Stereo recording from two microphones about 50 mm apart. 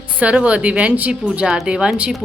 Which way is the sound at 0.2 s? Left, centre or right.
Right.